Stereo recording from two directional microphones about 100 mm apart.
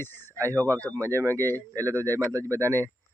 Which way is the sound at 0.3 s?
30° right (ahead or behind).